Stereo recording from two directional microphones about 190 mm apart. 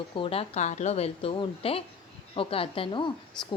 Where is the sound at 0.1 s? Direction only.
30° left (ahead or behind).